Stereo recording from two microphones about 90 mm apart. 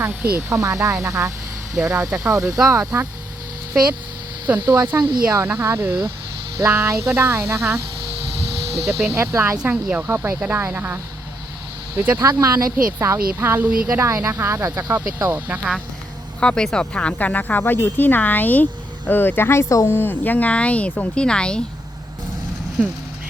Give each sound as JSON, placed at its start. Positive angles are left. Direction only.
{"t": 0.0, "sound": "speech", "side_deg": -20}
{"t": 0.5, "sound": "speech", "side_deg": -35}
{"t": 4.4, "sound": "speech", "side_deg": -20}
{"t": 8.8, "sound": "speech", "side_deg": 0}
{"t": 9.0, "sound": "speech", "side_deg": -25}
{"t": 12.2, "sound": "speech", "side_deg": -45}
{"t": 13.0, "sound": "speech", "side_deg": -30}
{"t": 15.4, "sound": "speech", "side_deg": -20}
{"t": 16.4, "sound": "speech", "side_deg": 10}
{"t": 20.0, "sound": "speech", "side_deg": 20}